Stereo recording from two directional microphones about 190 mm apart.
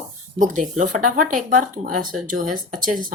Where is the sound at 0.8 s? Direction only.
45° right (ahead or behind).